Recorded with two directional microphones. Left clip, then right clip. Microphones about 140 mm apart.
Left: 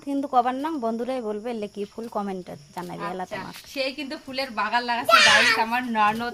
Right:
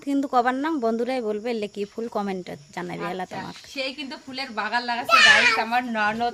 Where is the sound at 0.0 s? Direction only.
35° right (ahead or behind).